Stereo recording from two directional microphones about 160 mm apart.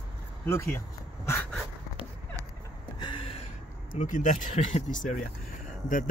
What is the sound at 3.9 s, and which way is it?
Speech, 50° left (ahead or behind).